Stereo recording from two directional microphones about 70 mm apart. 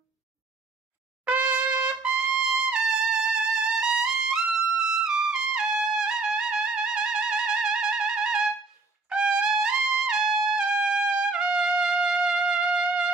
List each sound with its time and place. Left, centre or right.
1.2 s trumpet: centre